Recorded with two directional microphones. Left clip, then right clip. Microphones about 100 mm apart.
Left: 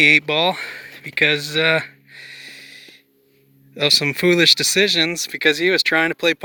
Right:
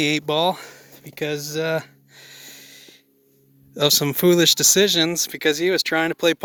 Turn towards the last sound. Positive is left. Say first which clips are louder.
# left 1 dB
turn(degrees=-55)  # may be behind; listen again after turning